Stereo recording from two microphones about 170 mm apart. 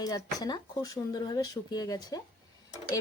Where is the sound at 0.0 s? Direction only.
20° left (ahead or behind).